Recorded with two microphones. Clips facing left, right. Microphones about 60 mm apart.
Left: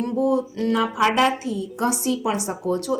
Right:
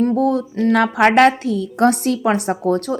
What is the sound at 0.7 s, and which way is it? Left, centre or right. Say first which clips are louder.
A woman's voice: right 6 dB; right.